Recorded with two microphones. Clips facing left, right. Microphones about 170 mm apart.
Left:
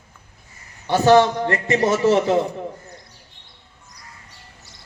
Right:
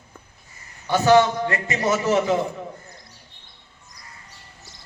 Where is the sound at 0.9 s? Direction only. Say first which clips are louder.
Left 2 dB; 30° left (ahead or behind).